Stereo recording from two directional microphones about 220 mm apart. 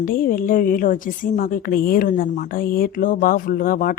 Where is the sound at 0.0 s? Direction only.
40° left (ahead or behind).